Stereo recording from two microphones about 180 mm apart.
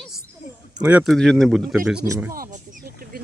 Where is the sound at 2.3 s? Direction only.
50° right (ahead or behind).